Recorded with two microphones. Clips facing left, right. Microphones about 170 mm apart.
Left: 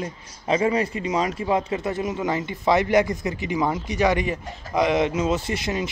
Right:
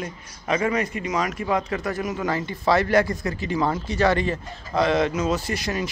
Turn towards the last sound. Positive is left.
turn(degrees=20)  # may be behind; listen again after turning